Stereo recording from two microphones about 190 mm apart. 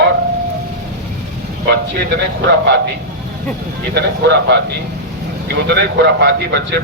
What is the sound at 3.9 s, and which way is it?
A man's voice, 65° right (ahead or behind).